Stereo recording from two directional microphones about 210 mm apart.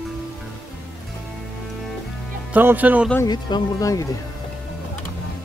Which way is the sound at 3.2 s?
20° left (ahead or behind).